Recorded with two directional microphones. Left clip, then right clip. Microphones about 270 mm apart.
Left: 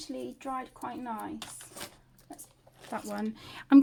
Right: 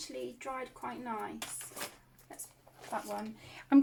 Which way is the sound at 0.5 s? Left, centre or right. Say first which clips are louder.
Left 3 dB; left.